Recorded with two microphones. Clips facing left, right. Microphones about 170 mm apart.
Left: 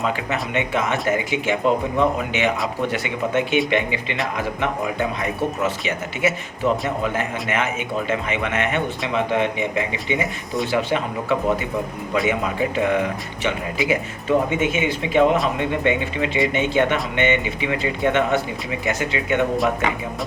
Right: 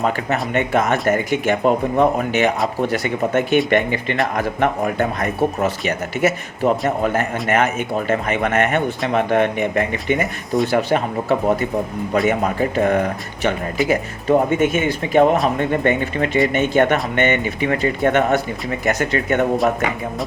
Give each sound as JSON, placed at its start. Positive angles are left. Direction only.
{"t": 0.0, "sound": "speech", "side_deg": -45}
{"t": 3.7, "sound": "speech", "side_deg": -50}
{"t": 10.7, "sound": "speech", "side_deg": -45}